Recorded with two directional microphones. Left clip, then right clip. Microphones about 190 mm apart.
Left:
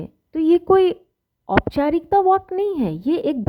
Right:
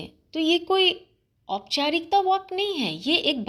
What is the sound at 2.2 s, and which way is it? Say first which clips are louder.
Speech: left 6 dB; 55° left (ahead or behind).